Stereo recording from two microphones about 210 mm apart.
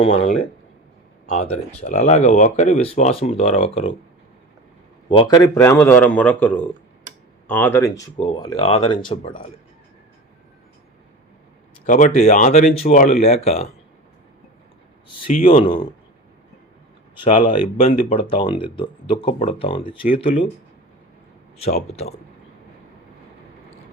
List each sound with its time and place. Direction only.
1.8 s speech: 35° left (ahead or behind)
5.0 s speech: 20° left (ahead or behind)
8.1 s speech: 25° left (ahead or behind)
11.9 s speech: 35° left (ahead or behind)
15.3 s speech: 40° left (ahead or behind)
15.5 s speech: 25° left (ahead or behind)
17.4 s speech: 25° left (ahead or behind)
21.8 s speech: 30° left (ahead or behind)